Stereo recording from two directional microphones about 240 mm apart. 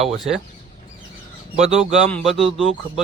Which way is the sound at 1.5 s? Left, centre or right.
Right.